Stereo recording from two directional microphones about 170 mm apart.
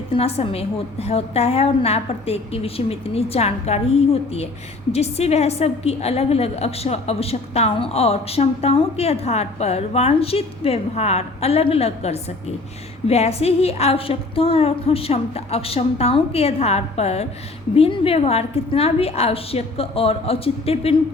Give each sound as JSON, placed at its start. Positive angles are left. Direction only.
{"t": 0.1, "sound": "a woman's voice", "side_deg": 35}